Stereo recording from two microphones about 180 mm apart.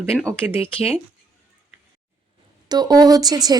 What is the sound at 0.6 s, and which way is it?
Speech, 35° left (ahead or behind).